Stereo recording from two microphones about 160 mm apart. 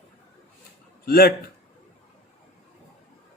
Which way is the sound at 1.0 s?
70° left (ahead or behind).